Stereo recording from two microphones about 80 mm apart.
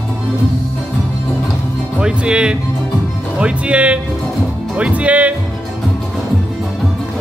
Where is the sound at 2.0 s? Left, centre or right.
Centre.